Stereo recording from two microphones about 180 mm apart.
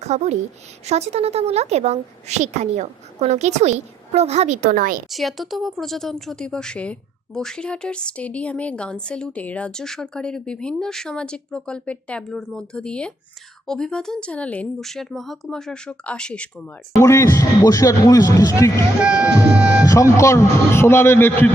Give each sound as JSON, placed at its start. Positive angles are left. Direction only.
{"t": 0.0, "sound": "a woman's voice", "side_deg": -40}
{"t": 5.0, "sound": "a woman's voice", "side_deg": 0}
{"t": 17.0, "sound": "speech", "side_deg": 15}
{"t": 18.9, "sound": "music", "side_deg": -5}
{"t": 19.9, "sound": "speech", "side_deg": 15}